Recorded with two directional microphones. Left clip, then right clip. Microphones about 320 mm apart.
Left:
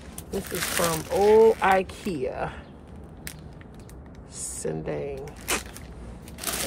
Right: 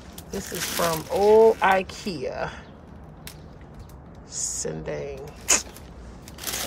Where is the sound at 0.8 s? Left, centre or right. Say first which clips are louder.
Right 1 dB; centre.